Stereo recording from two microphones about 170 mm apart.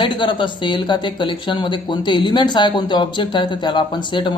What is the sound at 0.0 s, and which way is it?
Speech, 30° left (ahead or behind).